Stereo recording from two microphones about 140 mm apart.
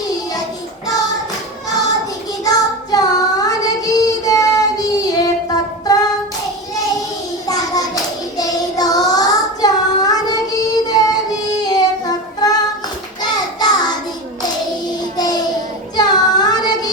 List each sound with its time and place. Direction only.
2.4 s child singing: 25° left (ahead or behind)
8.4 s child singing: 25° left (ahead or behind)
15.1 s child singing: 30° left (ahead or behind)